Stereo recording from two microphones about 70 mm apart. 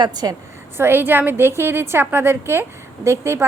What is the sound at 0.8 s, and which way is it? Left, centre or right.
A woman's voice, right.